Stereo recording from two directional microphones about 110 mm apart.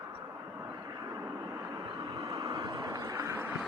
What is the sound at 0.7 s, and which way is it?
Vehicle, 35° right (ahead or behind).